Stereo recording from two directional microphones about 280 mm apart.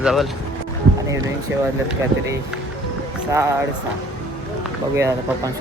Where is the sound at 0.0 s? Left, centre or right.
Centre.